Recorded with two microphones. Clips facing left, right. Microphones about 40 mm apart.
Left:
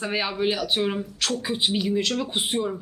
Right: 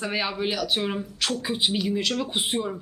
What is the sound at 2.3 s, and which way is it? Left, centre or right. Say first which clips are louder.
Speech: left 1 dB; centre.